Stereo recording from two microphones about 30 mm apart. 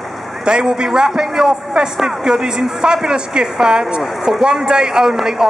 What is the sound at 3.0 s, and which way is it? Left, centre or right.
Speech, right.